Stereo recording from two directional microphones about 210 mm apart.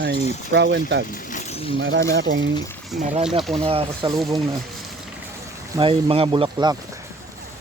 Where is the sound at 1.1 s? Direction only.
40° left (ahead or behind).